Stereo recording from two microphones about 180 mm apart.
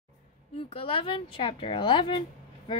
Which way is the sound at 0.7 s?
30° left (ahead or behind).